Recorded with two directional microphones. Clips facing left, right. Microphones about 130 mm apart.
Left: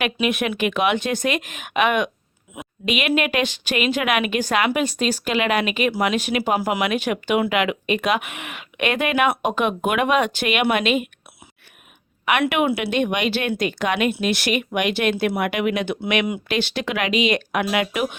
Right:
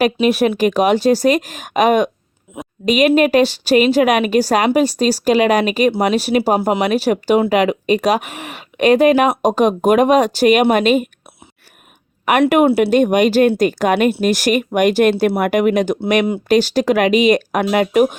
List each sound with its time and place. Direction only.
0.0 s a woman's voice: 35° right (ahead or behind)
12.2 s a woman's voice: 40° right (ahead or behind)
15.1 s speech: 30° right (ahead or behind)
15.4 s a woman's voice: 45° right (ahead or behind)